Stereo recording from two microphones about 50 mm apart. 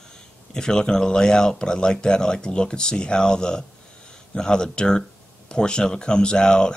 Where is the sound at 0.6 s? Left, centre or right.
Centre.